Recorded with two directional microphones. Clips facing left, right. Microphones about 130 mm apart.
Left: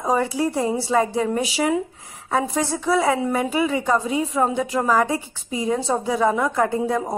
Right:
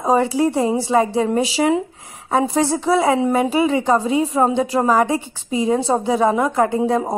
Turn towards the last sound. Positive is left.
turn(degrees=-25)  # may be behind; listen again after turning